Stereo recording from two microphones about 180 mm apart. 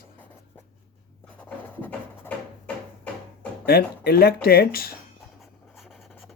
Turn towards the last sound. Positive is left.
turn(degrees=0)  # may be behind; listen again after turning